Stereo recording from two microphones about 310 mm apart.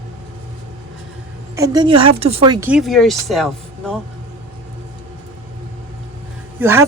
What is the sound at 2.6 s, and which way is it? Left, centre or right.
Speech, centre.